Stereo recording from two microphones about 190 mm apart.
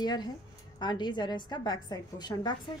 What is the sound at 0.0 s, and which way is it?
A woman's voice, 20° left (ahead or behind).